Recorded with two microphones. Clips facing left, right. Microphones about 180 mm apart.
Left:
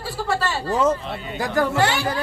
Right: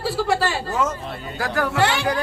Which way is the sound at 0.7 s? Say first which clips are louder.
Left 8 dB; 30° left (ahead or behind).